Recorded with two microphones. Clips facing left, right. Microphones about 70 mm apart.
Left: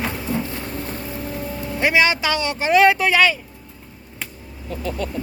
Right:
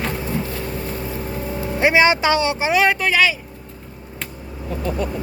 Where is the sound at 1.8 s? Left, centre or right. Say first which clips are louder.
Right 3 dB; right.